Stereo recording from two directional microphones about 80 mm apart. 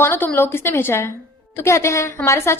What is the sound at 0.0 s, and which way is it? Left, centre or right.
A woman's voice, left.